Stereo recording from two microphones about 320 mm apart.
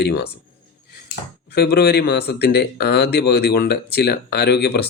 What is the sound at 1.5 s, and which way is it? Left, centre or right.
Speech, left.